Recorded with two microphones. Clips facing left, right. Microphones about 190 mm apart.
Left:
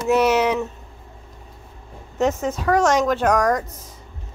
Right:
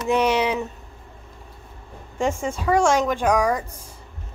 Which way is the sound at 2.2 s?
10° right (ahead or behind).